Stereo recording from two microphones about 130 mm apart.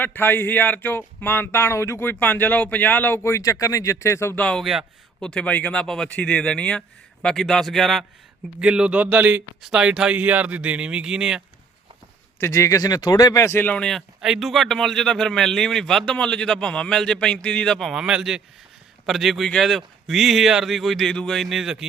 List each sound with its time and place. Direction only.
0.0 s speech: 15° left (ahead or behind)
4.4 s speech: centre (ahead or behind)
12.4 s speech: 25° left (ahead or behind); by 21.8 s 5° right (ahead or behind)